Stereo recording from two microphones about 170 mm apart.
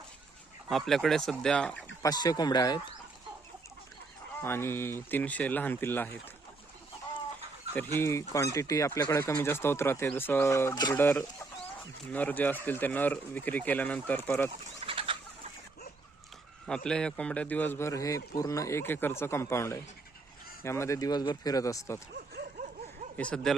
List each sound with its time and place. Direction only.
0.7 s speech: centre (ahead or behind)
2.0 s speech: 25° left (ahead or behind)
4.4 s a man's voice: 15° left (ahead or behind)
7.9 s a man's voice: 15° left (ahead or behind)
14.5 s bird: 35° right (ahead or behind)
16.6 s a man's voice: 5° left (ahead or behind)
23.1 s speech: 5° left (ahead or behind)